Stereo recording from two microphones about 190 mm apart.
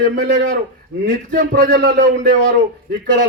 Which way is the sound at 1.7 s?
70° right (ahead or behind).